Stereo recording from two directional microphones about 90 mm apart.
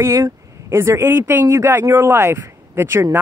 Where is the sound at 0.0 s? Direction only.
35° right (ahead or behind).